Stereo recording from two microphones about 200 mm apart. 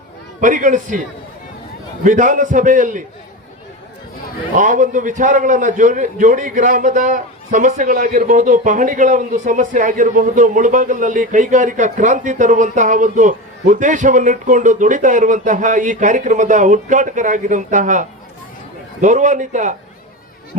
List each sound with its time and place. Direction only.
0.4 s a man's voice: 40° right (ahead or behind)
2.0 s a man's voice: 40° right (ahead or behind)
4.5 s a man's voice: 40° right (ahead or behind)
19.0 s a man's voice: 40° right (ahead or behind)